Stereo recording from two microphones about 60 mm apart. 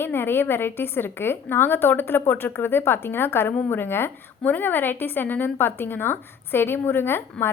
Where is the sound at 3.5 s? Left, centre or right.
Left.